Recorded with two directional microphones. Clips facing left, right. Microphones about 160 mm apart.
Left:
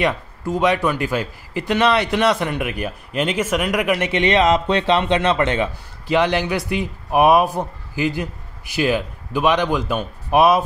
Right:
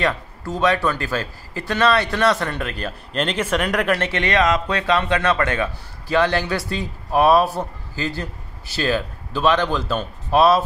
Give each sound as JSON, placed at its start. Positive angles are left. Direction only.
{"t": 0.0, "sound": "a man's voice", "side_deg": 20}